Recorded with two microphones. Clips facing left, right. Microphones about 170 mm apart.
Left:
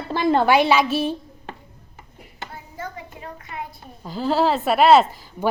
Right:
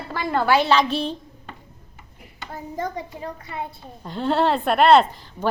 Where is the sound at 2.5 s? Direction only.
35° right (ahead or behind).